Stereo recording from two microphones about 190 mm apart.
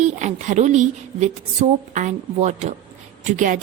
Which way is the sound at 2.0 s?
40° right (ahead or behind).